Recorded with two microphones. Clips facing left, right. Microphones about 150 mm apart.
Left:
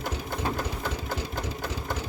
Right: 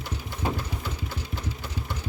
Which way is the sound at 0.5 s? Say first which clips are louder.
Left 3 dB; 50° left (ahead or behind).